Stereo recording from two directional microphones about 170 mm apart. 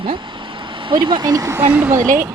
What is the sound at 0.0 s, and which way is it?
Speech, 30° right (ahead or behind).